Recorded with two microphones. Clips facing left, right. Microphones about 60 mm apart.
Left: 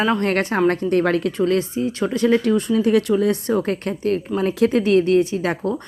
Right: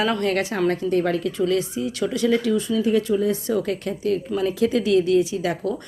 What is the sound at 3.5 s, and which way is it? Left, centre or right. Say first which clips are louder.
Speech: left 3 dB; left.